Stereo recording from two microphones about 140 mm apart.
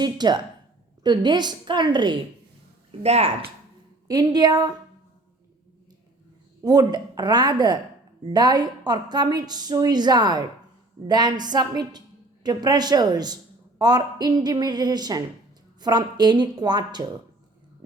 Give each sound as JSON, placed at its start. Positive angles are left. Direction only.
{"t": 0.0, "sound": "a woman's voice", "side_deg": -30}
{"t": 3.0, "sound": "speech", "side_deg": -50}
{"t": 4.1, "sound": "a woman's voice", "side_deg": -30}
{"t": 6.6, "sound": "a woman's voice", "side_deg": -30}